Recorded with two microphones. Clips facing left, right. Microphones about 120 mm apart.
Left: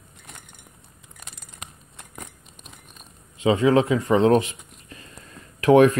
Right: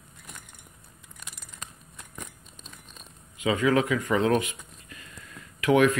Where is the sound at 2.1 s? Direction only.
25° left (ahead or behind).